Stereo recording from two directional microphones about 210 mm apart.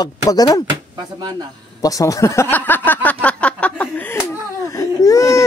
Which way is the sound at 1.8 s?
15° left (ahead or behind).